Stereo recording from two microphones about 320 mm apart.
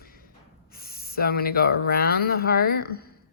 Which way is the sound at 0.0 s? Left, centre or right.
Left.